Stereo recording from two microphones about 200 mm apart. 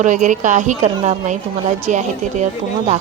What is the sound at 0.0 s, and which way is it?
Speech, 40° right (ahead or behind).